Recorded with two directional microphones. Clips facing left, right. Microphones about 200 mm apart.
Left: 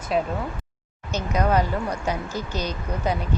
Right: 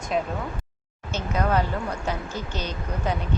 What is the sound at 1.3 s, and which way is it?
Speech, 15° left (ahead or behind).